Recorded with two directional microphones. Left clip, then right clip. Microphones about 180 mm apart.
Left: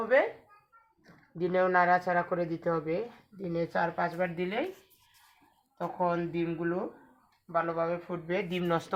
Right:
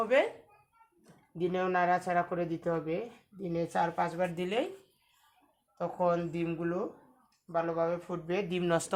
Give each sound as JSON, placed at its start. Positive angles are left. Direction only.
{"t": 1.4, "sound": "a woman's voice", "side_deg": -5}
{"t": 3.5, "sound": "speech", "side_deg": -20}
{"t": 5.7, "sound": "speech", "side_deg": -25}